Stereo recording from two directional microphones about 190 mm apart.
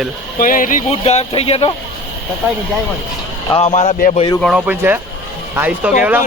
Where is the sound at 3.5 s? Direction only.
35° left (ahead or behind).